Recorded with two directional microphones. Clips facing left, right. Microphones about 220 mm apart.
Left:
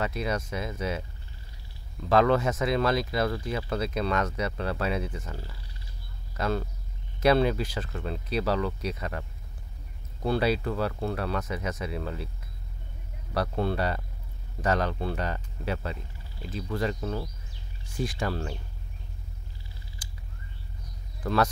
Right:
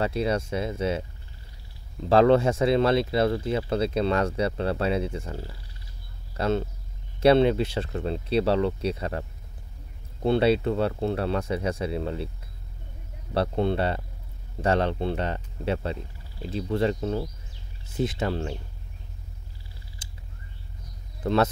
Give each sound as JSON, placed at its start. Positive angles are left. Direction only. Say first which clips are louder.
{"t": 0.0, "sound": "speech", "louder": "right 4 dB", "side_deg": -30}
{"t": 10.2, "sound": "speech", "louder": "right 5 dB", "side_deg": -25}
{"t": 13.3, "sound": "speech", "louder": "right 4 dB", "side_deg": -25}
{"t": 20.0, "sound": "a sound", "louder": "left 1 dB", "side_deg": -25}
{"t": 21.2, "sound": "speech", "louder": "right 3 dB", "side_deg": -25}